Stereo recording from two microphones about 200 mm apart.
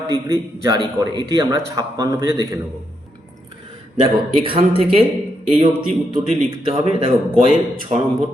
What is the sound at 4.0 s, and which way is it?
Speech, 25° right (ahead or behind).